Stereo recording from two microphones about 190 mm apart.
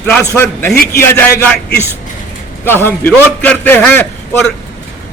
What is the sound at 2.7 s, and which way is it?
A man's voice, 10° left (ahead or behind).